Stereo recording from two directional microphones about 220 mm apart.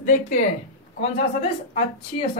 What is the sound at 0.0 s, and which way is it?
Speech, 35° left (ahead or behind).